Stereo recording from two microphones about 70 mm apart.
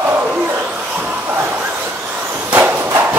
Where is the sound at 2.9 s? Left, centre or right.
Right.